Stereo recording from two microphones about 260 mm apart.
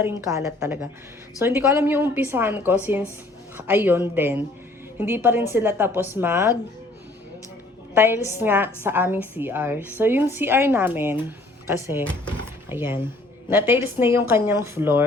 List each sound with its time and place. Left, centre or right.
0.0 s a woman's voice: centre
7.9 s a woman's voice: centre